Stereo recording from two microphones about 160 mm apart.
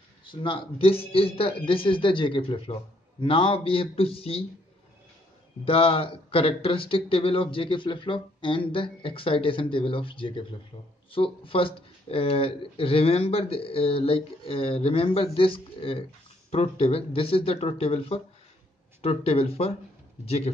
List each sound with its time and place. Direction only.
0.3 s speech: 30° left (ahead or behind)
5.7 s speech: 35° left (ahead or behind)